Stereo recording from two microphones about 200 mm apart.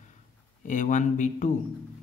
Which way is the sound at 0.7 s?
40° left (ahead or behind).